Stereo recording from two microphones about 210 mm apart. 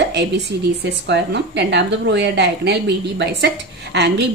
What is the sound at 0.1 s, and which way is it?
A woman's voice, 55° right (ahead or behind).